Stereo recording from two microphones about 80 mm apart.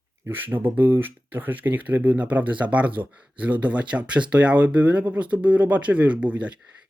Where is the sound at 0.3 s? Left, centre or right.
Right.